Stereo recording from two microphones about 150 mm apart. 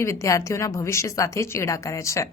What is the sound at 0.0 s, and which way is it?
A woman's voice, 20° left (ahead or behind).